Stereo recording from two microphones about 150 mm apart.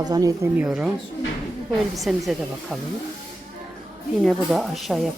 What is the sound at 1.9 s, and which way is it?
Speech, centre (ahead or behind).